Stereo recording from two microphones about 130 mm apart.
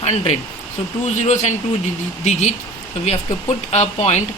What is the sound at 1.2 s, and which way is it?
Speech, 65° left (ahead or behind).